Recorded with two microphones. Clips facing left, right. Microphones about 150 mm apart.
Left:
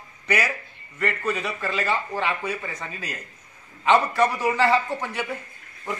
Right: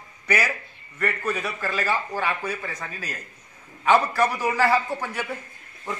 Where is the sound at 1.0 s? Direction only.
20° left (ahead or behind).